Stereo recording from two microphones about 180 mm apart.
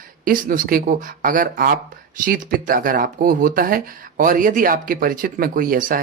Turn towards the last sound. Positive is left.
turn(degrees=-50)  # may be behind; listen again after turning